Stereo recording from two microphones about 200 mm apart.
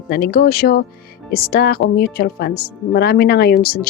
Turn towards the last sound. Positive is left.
turn(degrees=50)  # may be behind; listen again after turning